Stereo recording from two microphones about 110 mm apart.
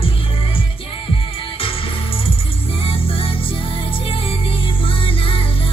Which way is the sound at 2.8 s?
60° left (ahead or behind).